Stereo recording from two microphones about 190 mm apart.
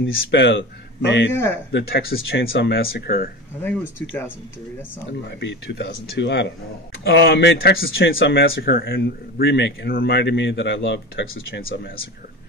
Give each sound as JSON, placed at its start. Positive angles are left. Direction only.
{"t": 0.2, "sound": "speech", "side_deg": 65}
{"t": 1.3, "sound": "speech", "side_deg": 15}
{"t": 1.7, "sound": "a man's voice", "side_deg": 60}
{"t": 4.0, "sound": "speech", "side_deg": 10}
{"t": 5.4, "sound": "a man's voice", "side_deg": 70}